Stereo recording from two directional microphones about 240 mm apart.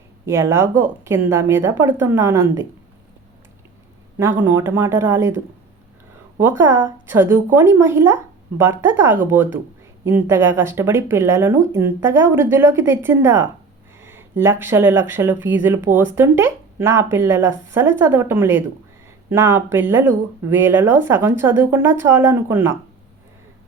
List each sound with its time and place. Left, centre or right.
0.3 s speech: centre
4.2 s speech: centre
6.4 s speech: centre